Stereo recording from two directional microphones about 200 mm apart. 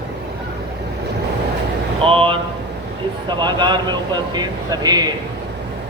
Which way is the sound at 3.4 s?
20° right (ahead or behind).